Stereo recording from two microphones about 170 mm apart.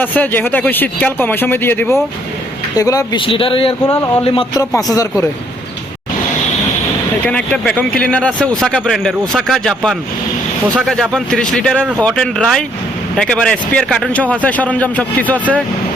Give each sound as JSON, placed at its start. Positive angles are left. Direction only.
{"t": 0.0, "sound": "a man's voice", "side_deg": 10}
{"t": 4.2, "sound": "a man's voice", "side_deg": 35}
{"t": 4.5, "sound": "speech", "side_deg": 20}
{"t": 7.3, "sound": "a man's voice", "side_deg": 5}